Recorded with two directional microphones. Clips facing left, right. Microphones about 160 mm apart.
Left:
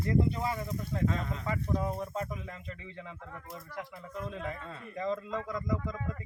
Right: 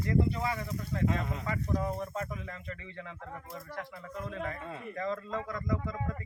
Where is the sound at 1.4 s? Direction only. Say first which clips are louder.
Left 1 dB; 25° left (ahead or behind).